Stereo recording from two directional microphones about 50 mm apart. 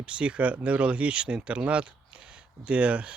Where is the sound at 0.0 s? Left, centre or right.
Right.